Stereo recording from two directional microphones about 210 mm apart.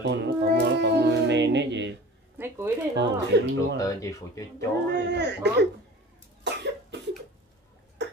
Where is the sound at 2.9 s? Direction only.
55° right (ahead or behind).